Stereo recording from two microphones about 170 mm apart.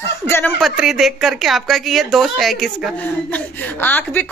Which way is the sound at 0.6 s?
Centre (ahead or behind).